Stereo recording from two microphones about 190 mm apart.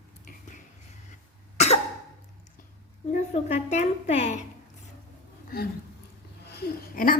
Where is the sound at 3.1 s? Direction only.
35° left (ahead or behind).